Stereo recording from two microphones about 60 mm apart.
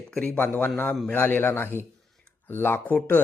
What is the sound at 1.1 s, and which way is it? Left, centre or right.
Speech, left.